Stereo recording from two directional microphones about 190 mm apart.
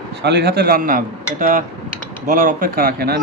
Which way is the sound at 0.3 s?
60° right (ahead or behind).